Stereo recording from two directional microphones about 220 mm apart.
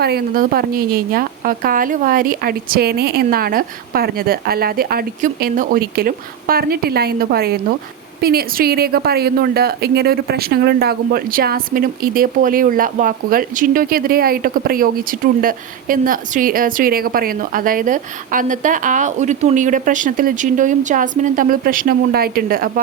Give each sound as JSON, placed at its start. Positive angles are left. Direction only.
{"t": 0.0, "sound": "a woman's voice", "side_deg": -45}